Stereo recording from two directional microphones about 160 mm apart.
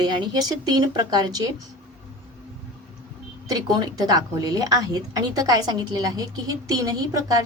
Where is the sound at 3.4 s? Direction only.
25° right (ahead or behind).